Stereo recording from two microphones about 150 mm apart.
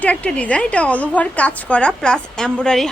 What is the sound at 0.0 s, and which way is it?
A woman's voice, 10° left (ahead or behind).